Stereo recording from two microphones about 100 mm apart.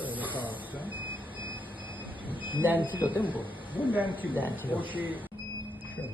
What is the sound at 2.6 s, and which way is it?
Speech, 15° right (ahead or behind).